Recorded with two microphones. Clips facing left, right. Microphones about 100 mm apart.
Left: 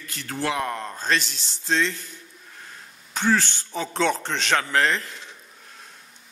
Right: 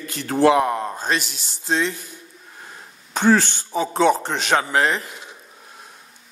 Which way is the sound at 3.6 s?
10° right (ahead or behind).